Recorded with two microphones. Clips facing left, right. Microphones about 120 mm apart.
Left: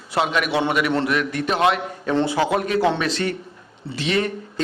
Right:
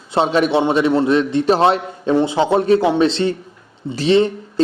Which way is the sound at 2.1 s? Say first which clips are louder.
Right 5 dB; 20° right (ahead or behind).